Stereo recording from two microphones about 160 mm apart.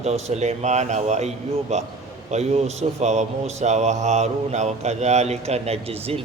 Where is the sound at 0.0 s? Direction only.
45° right (ahead or behind).